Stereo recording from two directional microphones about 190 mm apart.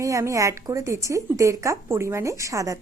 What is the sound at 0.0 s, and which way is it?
A woman's voice, 15° right (ahead or behind).